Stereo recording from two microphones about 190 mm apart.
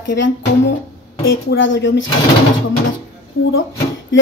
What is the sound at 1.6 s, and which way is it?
Speech, 75° left (ahead or behind).